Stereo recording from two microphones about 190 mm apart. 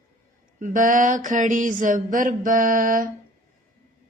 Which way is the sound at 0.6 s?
45° right (ahead or behind).